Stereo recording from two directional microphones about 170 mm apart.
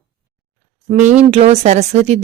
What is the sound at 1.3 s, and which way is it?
Speech, 35° right (ahead or behind).